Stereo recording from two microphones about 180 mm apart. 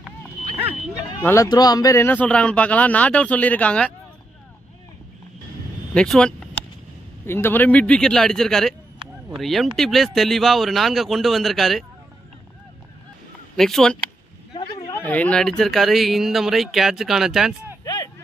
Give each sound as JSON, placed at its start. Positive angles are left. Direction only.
{"t": 1.2, "sound": "a man's voice", "side_deg": 15}
{"t": 5.9, "sound": "vehicle", "side_deg": 5}
{"t": 7.2, "sound": "speech", "side_deg": 10}
{"t": 13.6, "sound": "speech", "side_deg": 0}
{"t": 15.0, "sound": "speech", "side_deg": 10}
{"t": 17.8, "sound": "a sound", "side_deg": 20}